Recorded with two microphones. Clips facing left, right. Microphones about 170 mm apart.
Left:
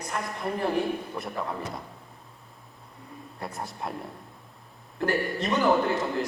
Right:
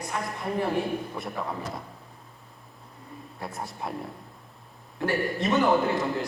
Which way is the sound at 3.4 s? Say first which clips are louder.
Even; centre (ahead or behind).